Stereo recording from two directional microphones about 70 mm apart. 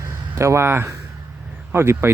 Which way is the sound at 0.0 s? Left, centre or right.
Right.